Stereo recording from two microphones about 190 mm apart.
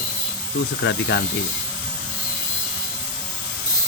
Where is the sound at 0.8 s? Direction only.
70° left (ahead or behind).